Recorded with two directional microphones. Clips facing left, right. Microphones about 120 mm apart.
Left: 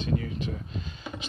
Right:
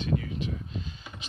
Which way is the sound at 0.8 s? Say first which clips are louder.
Left 3 dB; 70° left (ahead or behind).